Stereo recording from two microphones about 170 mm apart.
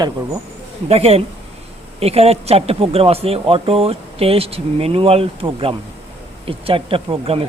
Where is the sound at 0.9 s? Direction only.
35° right (ahead or behind).